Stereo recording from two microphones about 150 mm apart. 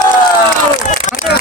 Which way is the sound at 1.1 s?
55° left (ahead or behind).